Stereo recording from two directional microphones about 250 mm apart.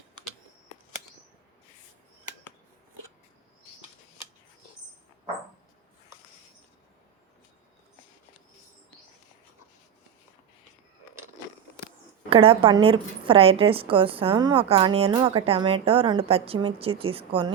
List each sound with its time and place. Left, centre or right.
12.3 s a woman's voice: right